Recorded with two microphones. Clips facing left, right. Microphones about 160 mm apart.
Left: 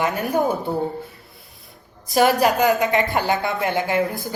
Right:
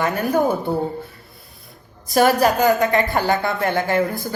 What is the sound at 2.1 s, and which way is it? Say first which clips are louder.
A woman's voice: right 1 dB; 20° left (ahead or behind).